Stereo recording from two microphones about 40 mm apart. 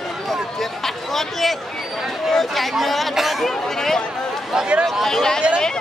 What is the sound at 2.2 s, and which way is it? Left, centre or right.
Speech, centre.